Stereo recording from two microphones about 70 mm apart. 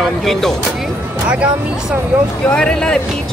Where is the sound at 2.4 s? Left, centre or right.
Centre.